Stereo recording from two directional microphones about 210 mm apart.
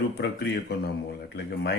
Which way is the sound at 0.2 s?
50° left (ahead or behind).